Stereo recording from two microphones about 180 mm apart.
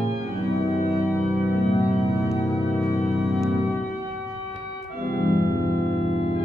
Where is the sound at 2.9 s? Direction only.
Centre (ahead or behind).